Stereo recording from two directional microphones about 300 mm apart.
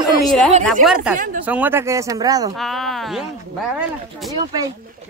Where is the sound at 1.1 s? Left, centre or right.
Right.